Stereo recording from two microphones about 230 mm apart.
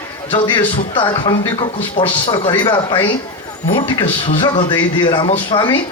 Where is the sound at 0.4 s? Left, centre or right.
Centre.